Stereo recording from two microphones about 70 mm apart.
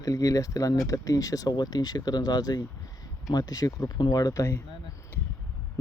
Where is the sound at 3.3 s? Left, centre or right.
Left.